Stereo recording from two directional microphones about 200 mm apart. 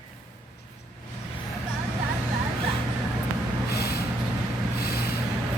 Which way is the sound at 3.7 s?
55° left (ahead or behind).